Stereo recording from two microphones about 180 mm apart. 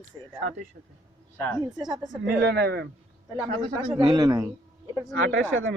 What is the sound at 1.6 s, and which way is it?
Speech, 20° right (ahead or behind).